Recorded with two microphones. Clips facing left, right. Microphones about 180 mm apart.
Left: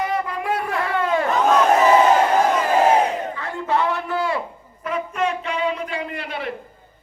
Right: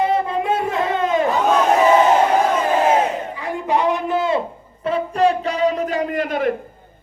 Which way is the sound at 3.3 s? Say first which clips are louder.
Right 2 dB; 15° right (ahead or behind).